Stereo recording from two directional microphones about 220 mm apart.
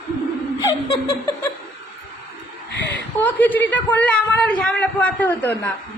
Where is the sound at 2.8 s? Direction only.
50° left (ahead or behind).